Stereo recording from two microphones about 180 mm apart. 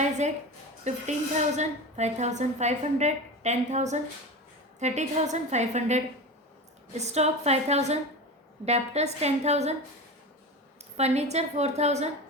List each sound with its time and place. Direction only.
0.9 s a woman's voice: 40° right (ahead or behind)
10.9 s a woman's voice: 35° right (ahead or behind)